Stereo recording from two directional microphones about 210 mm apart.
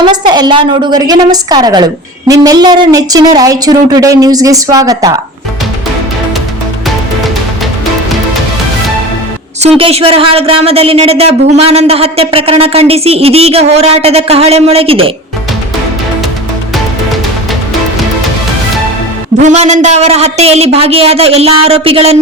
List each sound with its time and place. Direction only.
0.0 s a woman's voice: 20° right (ahead or behind)
9.6 s speech: 30° right (ahead or behind)
19.4 s speech: 35° right (ahead or behind)